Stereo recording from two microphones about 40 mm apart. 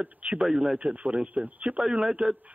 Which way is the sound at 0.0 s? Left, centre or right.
Right.